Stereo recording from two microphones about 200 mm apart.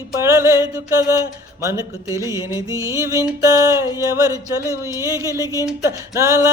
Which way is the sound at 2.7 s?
15° right (ahead or behind).